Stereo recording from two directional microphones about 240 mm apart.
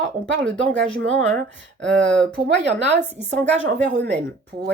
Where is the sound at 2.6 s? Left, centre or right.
Right.